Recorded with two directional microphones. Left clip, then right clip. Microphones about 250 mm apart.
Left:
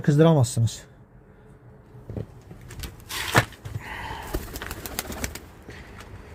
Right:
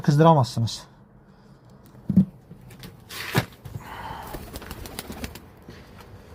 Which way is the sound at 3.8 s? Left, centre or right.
Centre.